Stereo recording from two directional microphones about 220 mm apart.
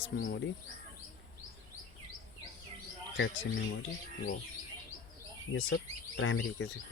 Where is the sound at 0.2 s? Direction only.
45° left (ahead or behind).